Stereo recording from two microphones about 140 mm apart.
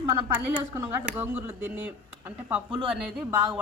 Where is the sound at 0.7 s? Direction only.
20° right (ahead or behind).